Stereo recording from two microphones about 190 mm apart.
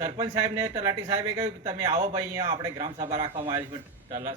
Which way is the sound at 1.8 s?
40° right (ahead or behind).